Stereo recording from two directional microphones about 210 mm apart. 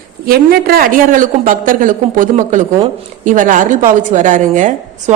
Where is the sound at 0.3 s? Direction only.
45° right (ahead or behind).